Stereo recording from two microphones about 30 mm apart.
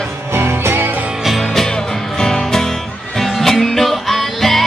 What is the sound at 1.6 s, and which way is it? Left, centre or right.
Music, left.